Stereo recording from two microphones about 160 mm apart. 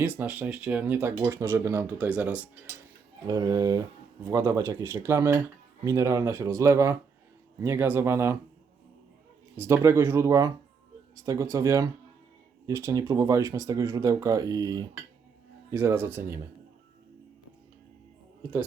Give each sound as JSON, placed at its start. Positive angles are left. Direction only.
{"t": 0.0, "sound": "speech", "side_deg": -10}
{"t": 3.2, "sound": "speech", "side_deg": -20}
{"t": 9.6, "sound": "speech", "side_deg": -15}